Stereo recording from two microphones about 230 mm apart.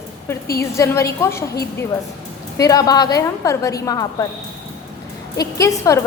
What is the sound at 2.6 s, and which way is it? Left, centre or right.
A woman's voice, centre.